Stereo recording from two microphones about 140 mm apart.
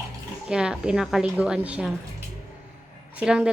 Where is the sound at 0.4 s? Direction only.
5° right (ahead or behind).